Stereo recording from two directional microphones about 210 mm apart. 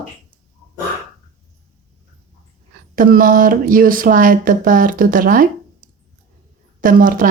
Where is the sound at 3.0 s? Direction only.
40° right (ahead or behind).